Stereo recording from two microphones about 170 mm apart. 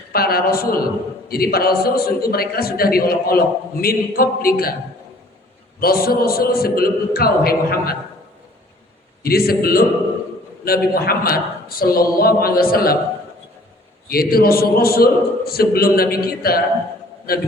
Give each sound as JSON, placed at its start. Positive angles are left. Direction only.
{"t": 0.1, "sound": "a man's voice", "side_deg": 65}
{"t": 5.8, "sound": "a man's voice", "side_deg": 60}
{"t": 9.2, "sound": "a man's voice", "side_deg": 65}
{"t": 14.1, "sound": "a man's voice", "side_deg": 60}